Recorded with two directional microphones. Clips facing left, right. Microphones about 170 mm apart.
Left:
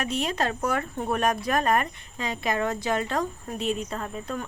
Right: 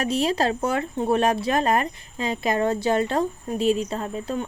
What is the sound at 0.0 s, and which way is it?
Speech, 35° right (ahead or behind).